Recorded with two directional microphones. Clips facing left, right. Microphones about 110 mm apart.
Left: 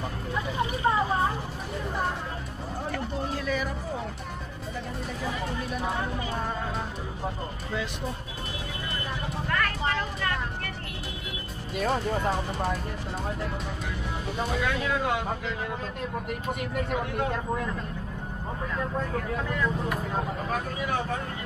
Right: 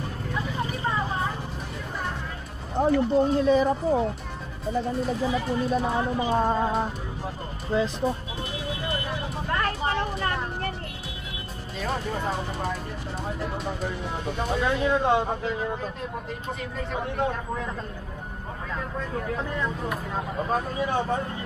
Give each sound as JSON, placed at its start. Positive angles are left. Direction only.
{"t": 0.8, "sound": "a sound", "side_deg": 30}
{"t": 2.8, "sound": "speech", "side_deg": -30}
{"t": 5.2, "sound": "speech", "side_deg": -30}
{"t": 9.5, "sound": "a sound", "side_deg": -25}
{"t": 11.7, "sound": "speech", "side_deg": 0}
{"t": 14.5, "sound": "speech", "side_deg": -25}
{"t": 16.9, "sound": "speech", "side_deg": -25}
{"t": 19.1, "sound": "speech", "side_deg": -20}